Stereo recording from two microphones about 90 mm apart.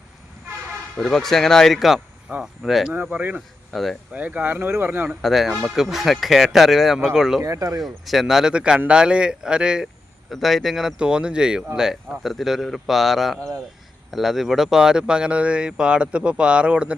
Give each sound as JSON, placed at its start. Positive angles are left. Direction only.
{"t": 0.9, "sound": "speech", "side_deg": 5}
{"t": 2.9, "sound": "speech", "side_deg": -20}
{"t": 3.7, "sound": "speech", "side_deg": 0}
{"t": 4.1, "sound": "speech", "side_deg": -15}
{"t": 5.2, "sound": "speech", "side_deg": 0}
{"t": 7.4, "sound": "speech", "side_deg": -40}
{"t": 7.8, "sound": "speech", "side_deg": 0}